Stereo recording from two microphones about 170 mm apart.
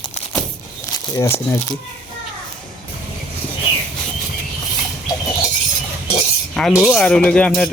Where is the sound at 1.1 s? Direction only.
15° left (ahead or behind).